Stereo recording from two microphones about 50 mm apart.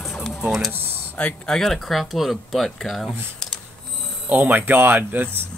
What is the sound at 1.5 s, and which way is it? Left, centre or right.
Speech, centre.